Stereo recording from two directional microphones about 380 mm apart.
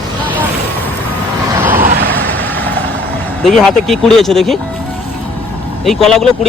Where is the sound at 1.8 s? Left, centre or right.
Right.